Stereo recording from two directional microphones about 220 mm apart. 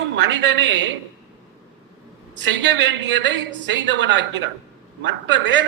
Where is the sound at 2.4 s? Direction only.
55° right (ahead or behind).